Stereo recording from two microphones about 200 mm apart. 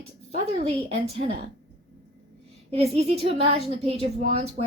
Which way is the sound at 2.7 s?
30° right (ahead or behind).